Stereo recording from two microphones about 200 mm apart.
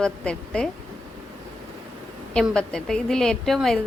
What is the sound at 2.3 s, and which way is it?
A woman's voice, 5° left (ahead or behind).